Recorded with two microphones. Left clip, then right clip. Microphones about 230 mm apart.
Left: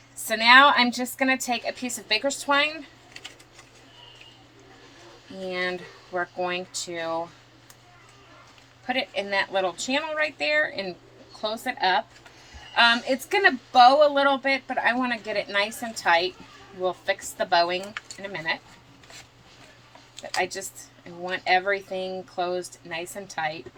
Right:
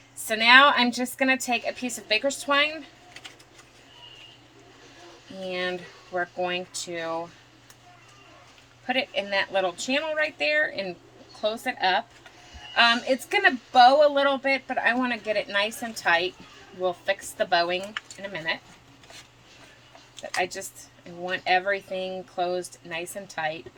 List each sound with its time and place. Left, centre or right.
0.3 s speech: right
5.5 s speech: right
8.9 s speech: right
20.4 s speech: right